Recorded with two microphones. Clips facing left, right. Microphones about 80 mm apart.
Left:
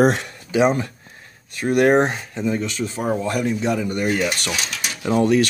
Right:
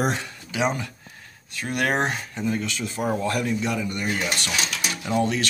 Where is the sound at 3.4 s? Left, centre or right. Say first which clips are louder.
Left 4 dB; left.